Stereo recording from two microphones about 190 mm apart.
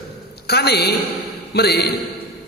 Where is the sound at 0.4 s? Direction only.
60° left (ahead or behind).